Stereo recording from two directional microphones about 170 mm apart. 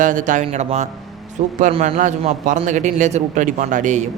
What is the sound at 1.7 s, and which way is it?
Speech, 35° right (ahead or behind).